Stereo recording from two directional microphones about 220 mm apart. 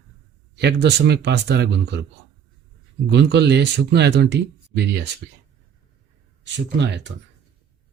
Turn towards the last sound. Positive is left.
turn(degrees=-55)  # may be behind; listen again after turning